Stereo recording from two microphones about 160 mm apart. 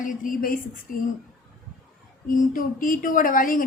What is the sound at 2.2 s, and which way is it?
Speech, 60° left (ahead or behind).